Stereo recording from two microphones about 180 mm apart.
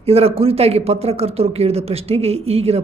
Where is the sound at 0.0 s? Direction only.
35° right (ahead or behind).